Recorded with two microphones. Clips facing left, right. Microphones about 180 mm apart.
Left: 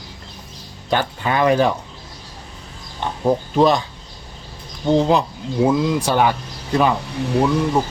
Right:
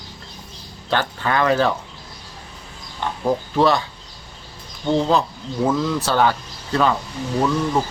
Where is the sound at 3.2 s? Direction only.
15° left (ahead or behind).